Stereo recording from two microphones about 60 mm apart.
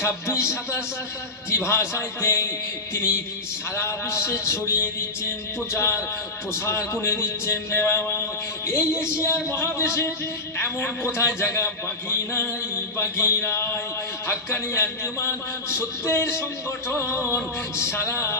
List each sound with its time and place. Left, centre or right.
0.0 s a man's voice: left
1.5 s a man's voice: left
9.0 s speech: centre
9.2 s a man's voice: left